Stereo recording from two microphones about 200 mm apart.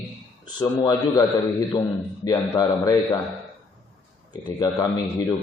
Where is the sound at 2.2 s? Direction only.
20° left (ahead or behind).